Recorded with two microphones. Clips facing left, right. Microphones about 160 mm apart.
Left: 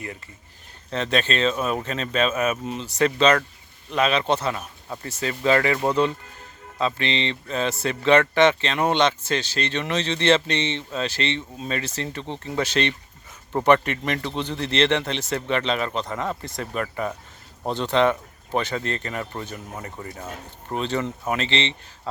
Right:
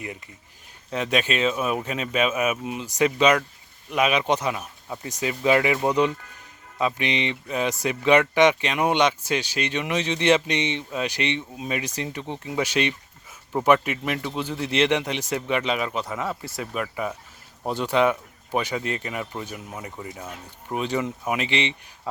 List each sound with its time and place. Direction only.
0.9 s speech: 10° right (ahead or behind)